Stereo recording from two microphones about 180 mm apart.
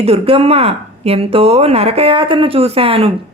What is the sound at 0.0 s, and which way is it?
A woman's voice, 35° right (ahead or behind).